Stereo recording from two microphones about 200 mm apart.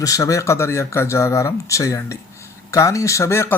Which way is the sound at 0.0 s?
15° left (ahead or behind).